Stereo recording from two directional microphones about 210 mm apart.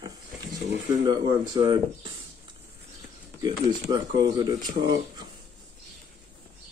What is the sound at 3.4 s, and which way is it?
Speech, 20° right (ahead or behind).